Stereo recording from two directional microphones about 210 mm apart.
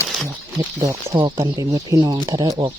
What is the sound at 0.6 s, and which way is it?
Speech, 15° right (ahead or behind).